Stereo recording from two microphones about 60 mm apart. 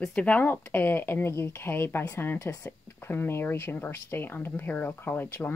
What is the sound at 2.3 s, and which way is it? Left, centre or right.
Speech, left.